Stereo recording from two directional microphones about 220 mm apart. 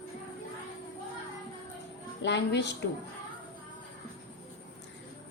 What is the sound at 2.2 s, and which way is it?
Speech, 50° left (ahead or behind).